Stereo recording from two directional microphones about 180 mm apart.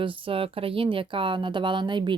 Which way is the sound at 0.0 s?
30° right (ahead or behind).